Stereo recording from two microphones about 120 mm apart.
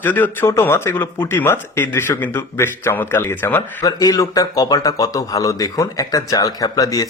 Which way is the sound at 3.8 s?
30° left (ahead or behind).